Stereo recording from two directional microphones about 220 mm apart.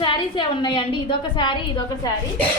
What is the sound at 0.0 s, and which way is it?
A woman's voice, 20° left (ahead or behind).